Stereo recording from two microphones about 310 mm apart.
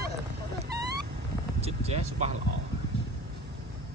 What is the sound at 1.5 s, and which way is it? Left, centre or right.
Vehicle, centre.